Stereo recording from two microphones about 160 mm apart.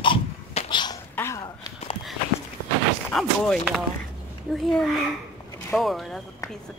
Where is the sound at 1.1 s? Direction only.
15° left (ahead or behind).